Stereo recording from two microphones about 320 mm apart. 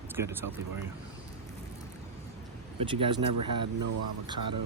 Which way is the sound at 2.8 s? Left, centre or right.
Centre.